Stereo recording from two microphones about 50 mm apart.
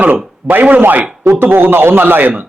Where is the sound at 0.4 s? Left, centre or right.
Right.